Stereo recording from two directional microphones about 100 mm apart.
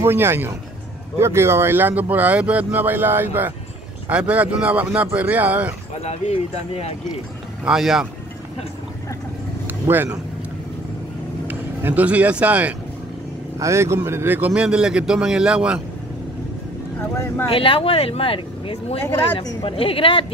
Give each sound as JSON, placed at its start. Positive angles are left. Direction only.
{"t": 0.0, "sound": "speech", "side_deg": -25}
{"t": 5.9, "sound": "speech", "side_deg": 85}
{"t": 7.6, "sound": "speech", "side_deg": -5}
{"t": 9.7, "sound": "vehicle", "side_deg": -20}
{"t": 11.4, "sound": "speech", "side_deg": -15}
{"t": 13.6, "sound": "speech", "side_deg": -30}
{"t": 14.5, "sound": "speech", "side_deg": -10}
{"t": 17.5, "sound": "speech", "side_deg": 65}